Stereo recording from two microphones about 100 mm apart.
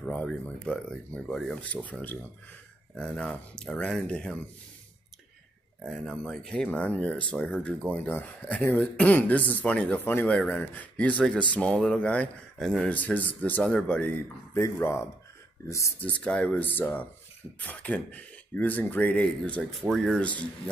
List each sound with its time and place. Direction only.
0.0 s speech: 10° left (ahead or behind)
5.9 s speech: 5° left (ahead or behind)
12.9 s speech: 15° left (ahead or behind)
14.5 s speech: 25° left (ahead or behind)
16.0 s speech: 10° left (ahead or behind)
19.7 s speech: centre (ahead or behind)